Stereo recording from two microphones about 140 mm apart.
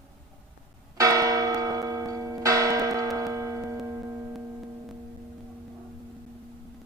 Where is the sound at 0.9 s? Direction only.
25° right (ahead or behind).